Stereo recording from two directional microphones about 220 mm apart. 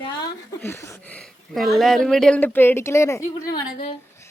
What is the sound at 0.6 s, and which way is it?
Speech, 10° left (ahead or behind).